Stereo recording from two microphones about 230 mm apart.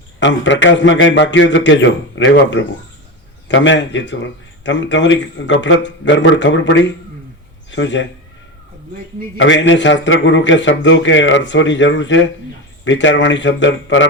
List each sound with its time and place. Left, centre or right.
0.2 s a man's voice: left
9.4 s a man's voice: left